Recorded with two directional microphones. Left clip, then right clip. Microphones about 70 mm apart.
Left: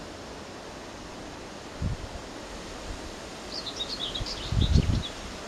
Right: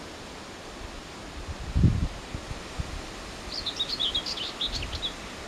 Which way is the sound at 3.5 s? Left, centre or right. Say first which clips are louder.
Right 4 dB; right.